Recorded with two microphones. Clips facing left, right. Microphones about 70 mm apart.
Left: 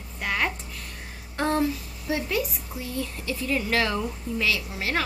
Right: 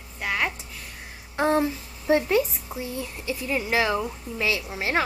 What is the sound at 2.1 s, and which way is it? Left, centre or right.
Speech, right.